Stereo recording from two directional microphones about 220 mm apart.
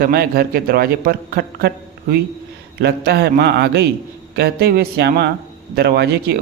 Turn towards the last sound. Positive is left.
turn(degrees=-45)  # may be behind; listen again after turning